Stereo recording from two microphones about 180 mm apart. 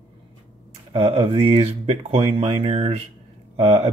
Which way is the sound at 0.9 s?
30° right (ahead or behind).